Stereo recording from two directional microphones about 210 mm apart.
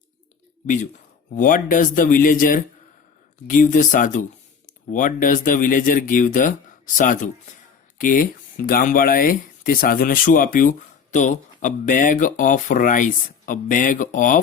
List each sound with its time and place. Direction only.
1.4 s speech: 40° left (ahead or behind)